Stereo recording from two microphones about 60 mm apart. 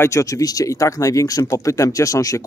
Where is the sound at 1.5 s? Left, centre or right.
Left.